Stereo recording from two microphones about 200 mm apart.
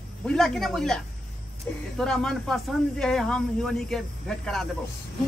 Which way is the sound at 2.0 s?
5° left (ahead or behind).